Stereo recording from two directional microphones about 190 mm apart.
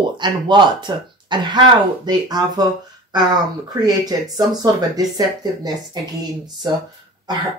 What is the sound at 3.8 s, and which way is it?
Speech, 20° right (ahead or behind).